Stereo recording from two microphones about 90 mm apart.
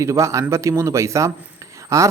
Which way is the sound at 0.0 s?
35° right (ahead or behind).